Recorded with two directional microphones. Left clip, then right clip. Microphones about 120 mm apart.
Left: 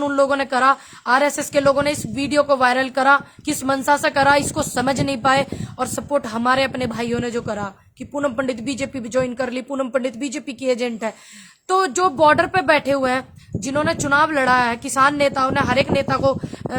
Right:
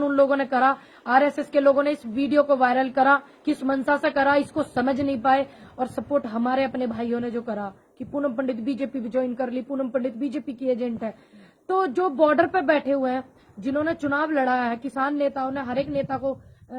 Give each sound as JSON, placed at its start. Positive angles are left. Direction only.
{"t": 0.0, "sound": "a woman's voice", "side_deg": 25}